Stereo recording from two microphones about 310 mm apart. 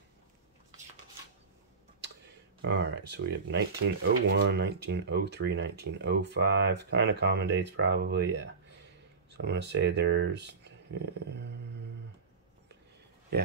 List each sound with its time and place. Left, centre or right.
2.6 s speech: right